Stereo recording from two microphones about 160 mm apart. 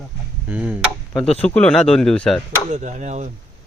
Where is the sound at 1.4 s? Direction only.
10° left (ahead or behind).